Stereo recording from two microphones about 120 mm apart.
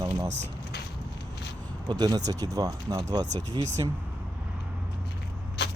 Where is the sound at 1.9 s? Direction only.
35° right (ahead or behind).